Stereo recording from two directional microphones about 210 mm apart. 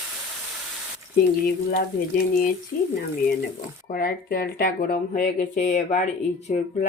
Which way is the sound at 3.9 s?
45° left (ahead or behind).